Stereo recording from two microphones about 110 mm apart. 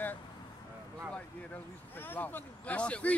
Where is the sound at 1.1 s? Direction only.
20° left (ahead or behind).